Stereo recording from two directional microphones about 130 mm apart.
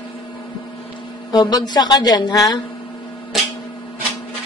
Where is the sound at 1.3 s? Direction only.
30° left (ahead or behind).